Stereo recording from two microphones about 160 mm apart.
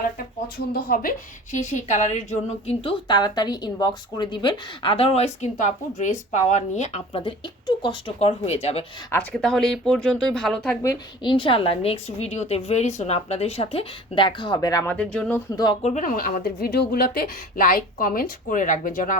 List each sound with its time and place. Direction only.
0.4 s speech: 70° left (ahead or behind)
1.5 s a woman's voice: 50° left (ahead or behind)
3.1 s a woman's voice: 25° left (ahead or behind); by 7.2 s 45° left (ahead or behind)
7.8 s a woman's voice: 30° left (ahead or behind)
9.1 s speech: 5° left (ahead or behind)
10.8 s a woman's voice: 30° left (ahead or behind); by 15.4 s 5° left (ahead or behind)
15.4 s speech: 25° left (ahead or behind)
15.8 s speech: 50° left (ahead or behind)